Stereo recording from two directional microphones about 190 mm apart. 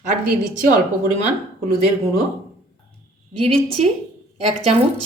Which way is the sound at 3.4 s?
30° right (ahead or behind).